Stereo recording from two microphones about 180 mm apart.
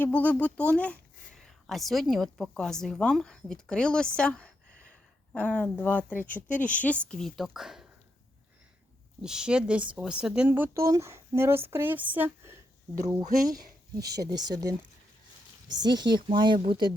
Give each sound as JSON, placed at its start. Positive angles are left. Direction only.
{"t": 0.0, "sound": "a woman's voice", "side_deg": 10}
{"t": 9.2, "sound": "speech", "side_deg": -5}
{"t": 14.0, "sound": "speech", "side_deg": -65}
{"t": 14.3, "sound": "speech", "side_deg": -20}